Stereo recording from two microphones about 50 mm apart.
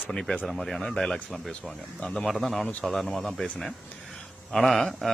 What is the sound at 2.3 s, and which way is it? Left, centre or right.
Speech, centre.